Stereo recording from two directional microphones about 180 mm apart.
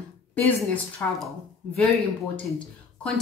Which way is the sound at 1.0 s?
10° left (ahead or behind).